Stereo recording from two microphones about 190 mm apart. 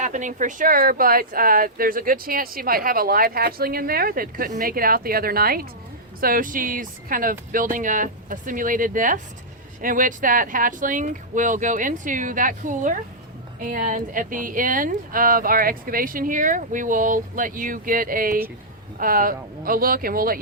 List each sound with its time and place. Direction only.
0.0 s speech: 40° right (ahead or behind)